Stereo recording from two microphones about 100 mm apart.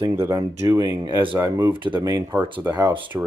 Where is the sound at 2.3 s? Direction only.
20° right (ahead or behind).